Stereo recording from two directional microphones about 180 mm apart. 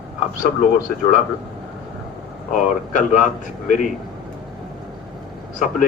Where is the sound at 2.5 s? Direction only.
45° left (ahead or behind).